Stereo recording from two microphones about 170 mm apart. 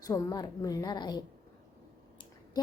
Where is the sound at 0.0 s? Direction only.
20° left (ahead or behind).